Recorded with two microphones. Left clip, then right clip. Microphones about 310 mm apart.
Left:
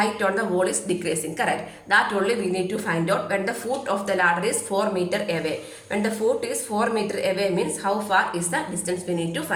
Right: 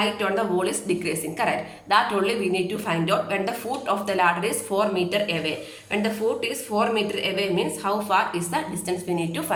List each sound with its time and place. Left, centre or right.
0.2 s a woman's voice: centre